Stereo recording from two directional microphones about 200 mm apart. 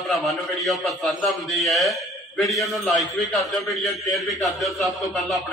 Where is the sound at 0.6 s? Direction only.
Centre (ahead or behind).